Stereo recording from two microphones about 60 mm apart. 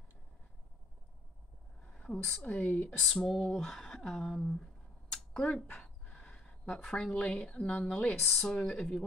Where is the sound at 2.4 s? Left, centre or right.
Left.